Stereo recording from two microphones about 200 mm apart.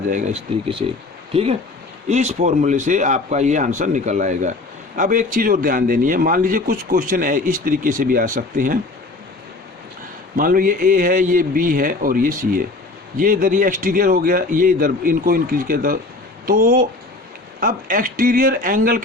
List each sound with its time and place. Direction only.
0.1 s a man's voice: 35° right (ahead or behind)
10.3 s a man's voice: 45° right (ahead or behind)